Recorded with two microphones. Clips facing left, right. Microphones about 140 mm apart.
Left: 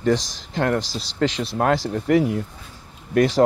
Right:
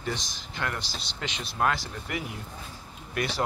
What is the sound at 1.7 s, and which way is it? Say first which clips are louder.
Speech: left 11 dB; 90° left.